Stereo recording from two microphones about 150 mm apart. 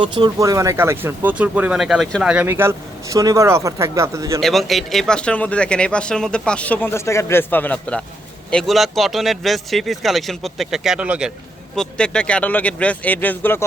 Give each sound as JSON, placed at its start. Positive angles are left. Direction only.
{"t": 0.0, "sound": "speech", "side_deg": -30}
{"t": 4.4, "sound": "speech", "side_deg": 0}
{"t": 11.8, "sound": "speech", "side_deg": 5}